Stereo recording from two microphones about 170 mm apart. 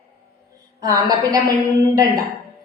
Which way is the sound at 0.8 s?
20° right (ahead or behind).